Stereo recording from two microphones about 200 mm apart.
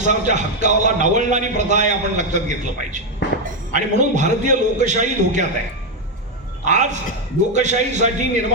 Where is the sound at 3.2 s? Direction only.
60° left (ahead or behind).